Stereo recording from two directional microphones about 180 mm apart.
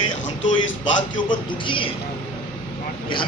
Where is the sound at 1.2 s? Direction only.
30° left (ahead or behind).